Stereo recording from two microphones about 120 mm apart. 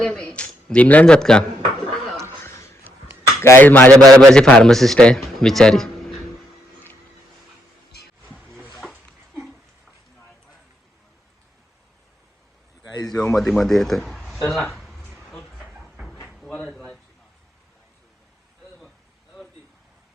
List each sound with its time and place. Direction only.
0.0 s a man's voice: 10° left (ahead or behind)
2.4 s a sound: 20° left (ahead or behind)
3.4 s a man's voice: 20° left (ahead or behind); by 5.9 s 5° left (ahead or behind)
8.2 s music: 15° left (ahead or behind)
13.1 s a man's voice: 5° left (ahead or behind)
14.4 s a sound: centre (ahead or behind)